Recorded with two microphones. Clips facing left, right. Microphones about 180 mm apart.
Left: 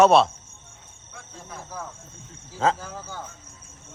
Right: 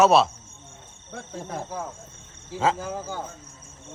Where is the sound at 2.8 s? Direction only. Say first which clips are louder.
Right 6 dB; 15° right (ahead or behind).